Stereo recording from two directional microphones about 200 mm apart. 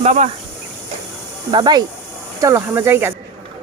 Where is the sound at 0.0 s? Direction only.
35° right (ahead or behind).